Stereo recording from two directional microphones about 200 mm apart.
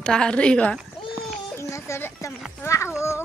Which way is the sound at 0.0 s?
5° left (ahead or behind).